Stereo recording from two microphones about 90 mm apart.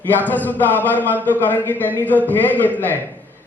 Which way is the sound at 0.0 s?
20° left (ahead or behind).